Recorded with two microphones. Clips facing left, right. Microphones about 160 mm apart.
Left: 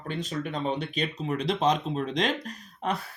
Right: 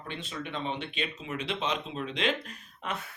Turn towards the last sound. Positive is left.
turn(degrees=35)  # may be behind; listen again after turning